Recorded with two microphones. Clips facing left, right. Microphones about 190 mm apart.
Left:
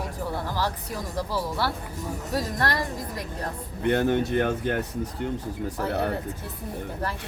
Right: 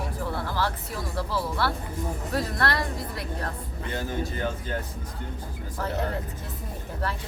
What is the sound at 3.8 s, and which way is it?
Speech, 65° left (ahead or behind).